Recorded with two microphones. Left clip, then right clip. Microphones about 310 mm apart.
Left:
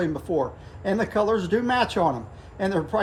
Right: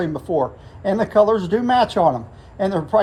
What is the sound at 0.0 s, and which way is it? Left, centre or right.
Speech, centre.